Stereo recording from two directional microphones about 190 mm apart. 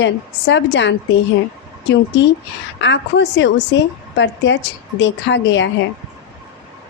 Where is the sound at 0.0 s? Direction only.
70° left (ahead or behind).